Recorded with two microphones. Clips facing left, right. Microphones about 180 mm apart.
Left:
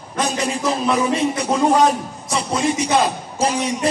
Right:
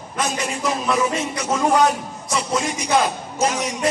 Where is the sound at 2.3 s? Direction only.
30° left (ahead or behind).